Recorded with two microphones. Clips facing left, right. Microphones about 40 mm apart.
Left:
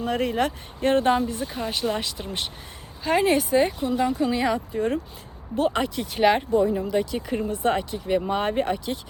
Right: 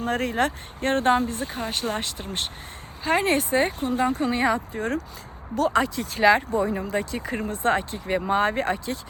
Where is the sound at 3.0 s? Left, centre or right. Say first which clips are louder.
Left 1 dB; right.